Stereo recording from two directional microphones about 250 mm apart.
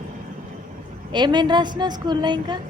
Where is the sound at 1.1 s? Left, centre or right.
Centre.